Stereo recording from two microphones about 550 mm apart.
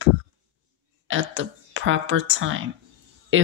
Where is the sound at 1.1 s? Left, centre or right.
Right.